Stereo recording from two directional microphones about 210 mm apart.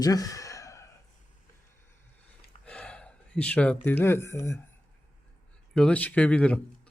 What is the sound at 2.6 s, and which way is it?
Speech, 5° left (ahead or behind).